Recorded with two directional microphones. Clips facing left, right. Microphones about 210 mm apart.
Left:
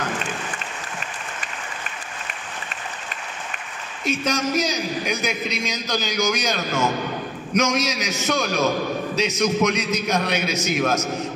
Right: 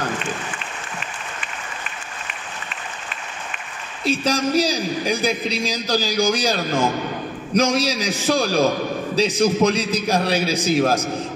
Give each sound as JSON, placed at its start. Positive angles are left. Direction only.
{"t": 4.0, "sound": "a man's voice", "side_deg": -30}